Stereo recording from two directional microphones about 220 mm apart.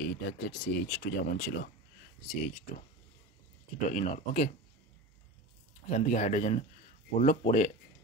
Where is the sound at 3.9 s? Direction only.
35° left (ahead or behind).